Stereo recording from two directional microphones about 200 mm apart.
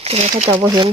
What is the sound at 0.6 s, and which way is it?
Speech, 20° right (ahead or behind).